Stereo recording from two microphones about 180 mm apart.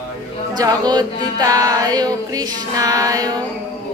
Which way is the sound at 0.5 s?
20° right (ahead or behind).